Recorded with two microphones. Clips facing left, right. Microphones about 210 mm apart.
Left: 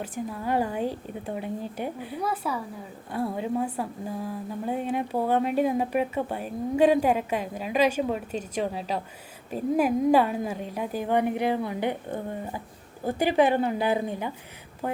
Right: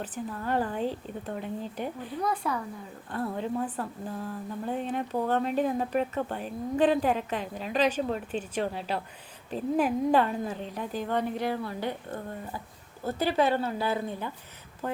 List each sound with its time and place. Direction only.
0.0 s speech: 10° left (ahead or behind)
8.3 s speech: 40° left (ahead or behind)
9.5 s speech: 10° left (ahead or behind)